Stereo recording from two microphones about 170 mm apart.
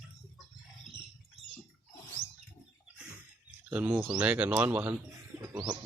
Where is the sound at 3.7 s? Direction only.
10° right (ahead or behind).